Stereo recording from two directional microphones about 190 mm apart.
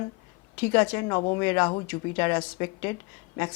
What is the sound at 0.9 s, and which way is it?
Speech, 20° left (ahead or behind).